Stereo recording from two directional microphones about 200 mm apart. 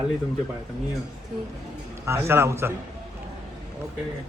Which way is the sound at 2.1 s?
15° right (ahead or behind).